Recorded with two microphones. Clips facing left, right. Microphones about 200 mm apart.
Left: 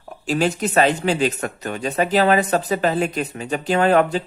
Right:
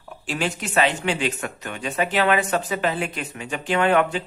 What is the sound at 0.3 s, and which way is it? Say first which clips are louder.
Speech: left 7 dB; 40° left (ahead or behind).